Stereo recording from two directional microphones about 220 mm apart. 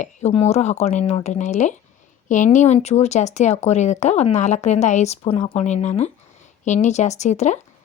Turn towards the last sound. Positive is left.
turn(degrees=30)  # may be behind; listen again after turning